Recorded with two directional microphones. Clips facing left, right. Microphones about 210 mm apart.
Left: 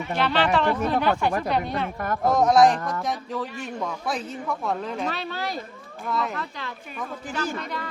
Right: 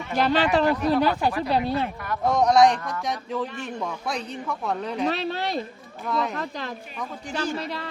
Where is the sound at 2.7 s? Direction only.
45° left (ahead or behind).